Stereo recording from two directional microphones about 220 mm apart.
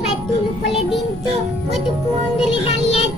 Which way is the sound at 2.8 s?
25° left (ahead or behind).